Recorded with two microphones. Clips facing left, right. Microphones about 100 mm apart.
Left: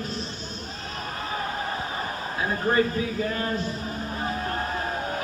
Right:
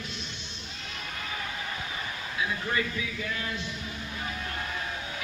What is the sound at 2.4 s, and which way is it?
A man's voice, 40° left (ahead or behind).